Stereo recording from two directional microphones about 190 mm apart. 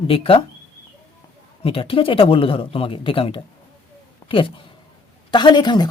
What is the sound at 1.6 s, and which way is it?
Speech, 30° left (ahead or behind).